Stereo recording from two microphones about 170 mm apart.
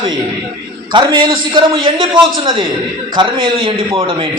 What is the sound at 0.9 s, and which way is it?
A man's voice, 30° right (ahead or behind).